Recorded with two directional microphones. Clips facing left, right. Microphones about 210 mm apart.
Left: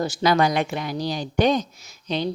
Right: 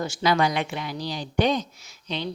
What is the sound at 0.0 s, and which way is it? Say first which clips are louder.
A woman's voice: left 3 dB; 40° left (ahead or behind).